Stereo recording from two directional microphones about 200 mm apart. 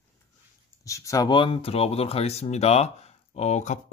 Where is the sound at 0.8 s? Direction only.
15° left (ahead or behind); by 3.8 s 35° left (ahead or behind).